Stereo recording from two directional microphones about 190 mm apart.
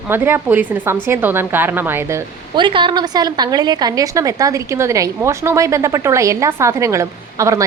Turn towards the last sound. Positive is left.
turn(degrees=-15)  # may be behind; listen again after turning